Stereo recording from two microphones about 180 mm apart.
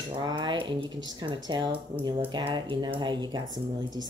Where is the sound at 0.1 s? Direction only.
25° right (ahead or behind).